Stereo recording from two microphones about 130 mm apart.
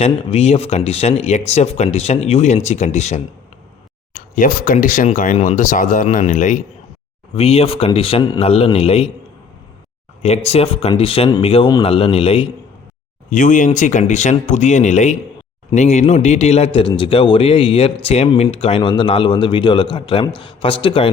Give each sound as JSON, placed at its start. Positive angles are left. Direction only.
{"t": 0.0, "sound": "a man's voice", "side_deg": 55}
{"t": 4.1, "sound": "speech", "side_deg": 90}
{"t": 7.3, "sound": "a man's voice", "side_deg": 50}
{"t": 10.2, "sound": "a man's voice", "side_deg": 55}
{"t": 13.3, "sound": "speech", "side_deg": 90}
{"t": 13.7, "sound": "speech", "side_deg": 70}
{"t": 16.7, "sound": "a man's voice", "side_deg": 40}